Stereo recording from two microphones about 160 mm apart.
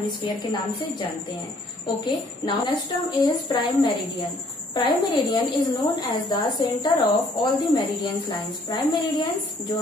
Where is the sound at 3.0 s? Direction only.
25° left (ahead or behind).